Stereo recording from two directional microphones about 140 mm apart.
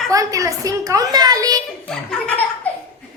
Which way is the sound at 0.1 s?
25° right (ahead or behind).